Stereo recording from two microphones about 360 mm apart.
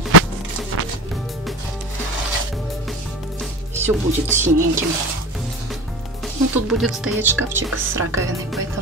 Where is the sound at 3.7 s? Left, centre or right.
Centre.